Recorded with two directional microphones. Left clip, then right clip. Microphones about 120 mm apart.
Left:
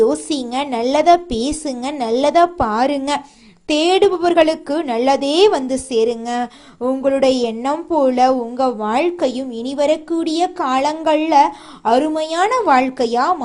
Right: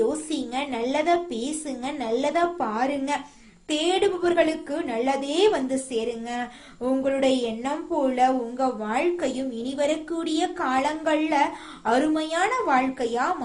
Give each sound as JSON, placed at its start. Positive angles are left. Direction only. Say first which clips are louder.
{"t": 0.3, "sound": "a woman's voice", "louder": "left 8 dB", "side_deg": 90}
{"t": 11.9, "sound": "a woman's voice", "louder": "left 7 dB", "side_deg": 45}
{"t": 12.4, "sound": "a woman's voice", "louder": "left 9 dB", "side_deg": 90}